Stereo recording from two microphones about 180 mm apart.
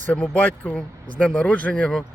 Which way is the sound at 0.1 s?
10° left (ahead or behind).